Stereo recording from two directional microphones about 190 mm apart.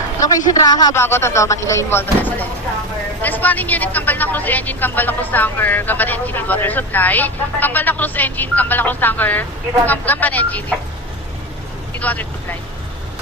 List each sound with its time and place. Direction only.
0.2 s speech: 20° left (ahead or behind)
11.9 s speech: 10° left (ahead or behind)